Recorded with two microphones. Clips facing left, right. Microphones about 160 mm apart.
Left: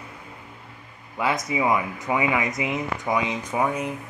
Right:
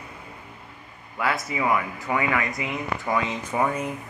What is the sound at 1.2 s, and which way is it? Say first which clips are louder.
Speech: left 2 dB; 20° left (ahead or behind).